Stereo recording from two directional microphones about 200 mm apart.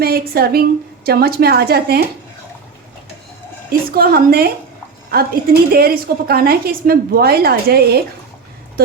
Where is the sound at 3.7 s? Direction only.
50° right (ahead or behind).